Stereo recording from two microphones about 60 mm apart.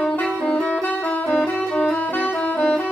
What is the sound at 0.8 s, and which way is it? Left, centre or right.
Saxophone, left.